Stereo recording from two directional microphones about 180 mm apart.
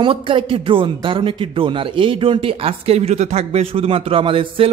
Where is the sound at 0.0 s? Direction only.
30° right (ahead or behind).